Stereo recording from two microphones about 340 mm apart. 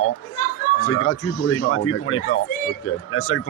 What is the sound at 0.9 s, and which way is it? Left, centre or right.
Speech, left.